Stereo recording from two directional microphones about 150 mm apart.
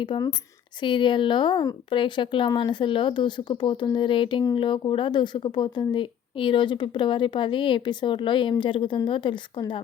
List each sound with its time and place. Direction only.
0.0 s speech: 35° left (ahead or behind)